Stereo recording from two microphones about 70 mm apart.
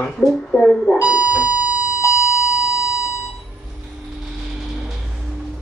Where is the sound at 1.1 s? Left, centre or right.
Right.